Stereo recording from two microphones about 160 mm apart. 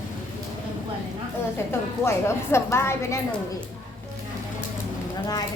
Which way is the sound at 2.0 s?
15° left (ahead or behind).